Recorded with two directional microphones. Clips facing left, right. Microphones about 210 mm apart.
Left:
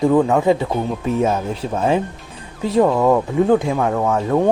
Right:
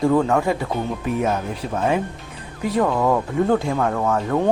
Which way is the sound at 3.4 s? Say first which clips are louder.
Left 3 dB; 15° left (ahead or behind).